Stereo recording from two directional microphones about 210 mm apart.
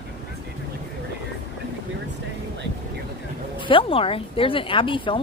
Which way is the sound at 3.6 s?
25° left (ahead or behind).